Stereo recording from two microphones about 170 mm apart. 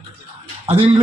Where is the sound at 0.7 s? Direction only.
35° right (ahead or behind).